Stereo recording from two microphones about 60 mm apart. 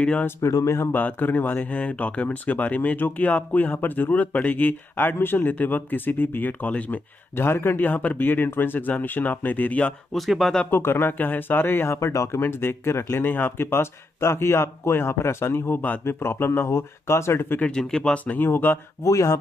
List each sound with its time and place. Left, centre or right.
0.0 s speech: centre
0.4 s speech: left
0.9 s speech: left
7.3 s speech: left
10.1 s speech: centre
10.7 s speech: left
12.4 s speech: left
17.6 s speech: centre
18.1 s speech: left
19.0 s speech: left